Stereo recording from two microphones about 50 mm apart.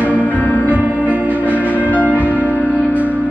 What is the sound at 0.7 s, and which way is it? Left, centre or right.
Music, right.